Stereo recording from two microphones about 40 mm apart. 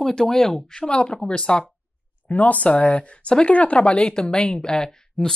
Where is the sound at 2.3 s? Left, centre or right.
Left.